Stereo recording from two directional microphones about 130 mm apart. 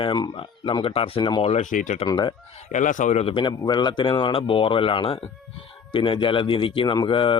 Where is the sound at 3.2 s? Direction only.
40° left (ahead or behind).